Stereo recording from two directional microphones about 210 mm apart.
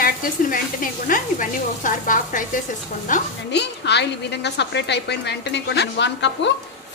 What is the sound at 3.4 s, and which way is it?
A woman's voice, 55° left (ahead or behind).